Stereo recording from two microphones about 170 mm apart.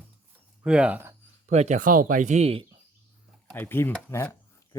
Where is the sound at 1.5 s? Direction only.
45° right (ahead or behind).